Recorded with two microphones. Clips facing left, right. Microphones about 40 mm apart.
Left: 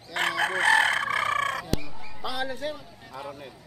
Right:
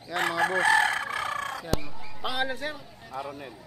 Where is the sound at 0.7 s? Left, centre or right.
Centre.